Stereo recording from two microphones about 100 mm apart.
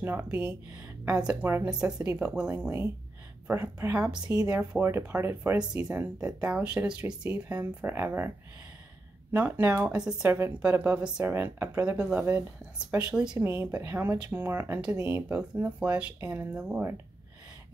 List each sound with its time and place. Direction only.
0.0 s speech: 20° right (ahead or behind)
3.4 s speech: 20° right (ahead or behind)
5.9 s speech: 10° right (ahead or behind)
9.3 s speech: 15° right (ahead or behind)
9.9 s speech: 5° right (ahead or behind)
10.2 s speech: 20° right (ahead or behind)
13.4 s speech: 25° right (ahead or behind)